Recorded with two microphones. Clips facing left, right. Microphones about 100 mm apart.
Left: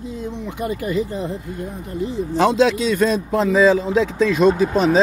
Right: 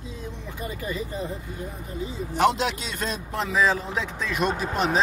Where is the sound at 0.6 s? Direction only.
70° left (ahead or behind).